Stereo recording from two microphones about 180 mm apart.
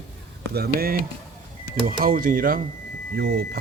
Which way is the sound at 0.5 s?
60° right (ahead or behind).